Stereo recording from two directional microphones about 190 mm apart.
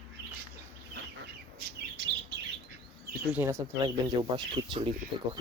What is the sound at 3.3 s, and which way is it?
Speech, 15° right (ahead or behind).